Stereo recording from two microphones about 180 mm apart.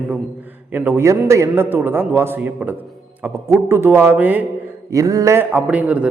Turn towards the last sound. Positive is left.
turn(degrees=-5)  # may be behind; listen again after turning